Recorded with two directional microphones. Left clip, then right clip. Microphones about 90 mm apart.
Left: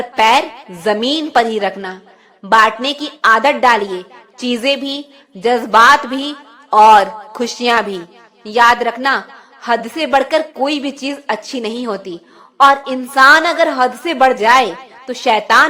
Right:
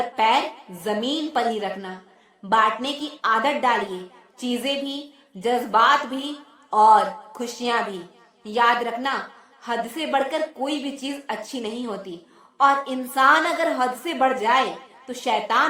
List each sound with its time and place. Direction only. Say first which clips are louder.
0.2 s a woman's voice: left 9 dB; 40° left (ahead or behind)
7.7 s a woman's voice: left 9 dB; 50° left (ahead or behind)
8.4 s a woman's voice: left 9 dB; 25° left (ahead or behind)